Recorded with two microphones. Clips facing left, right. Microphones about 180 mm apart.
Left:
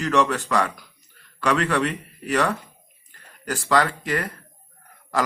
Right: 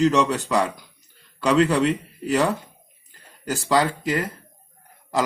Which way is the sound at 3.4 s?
25° right (ahead or behind).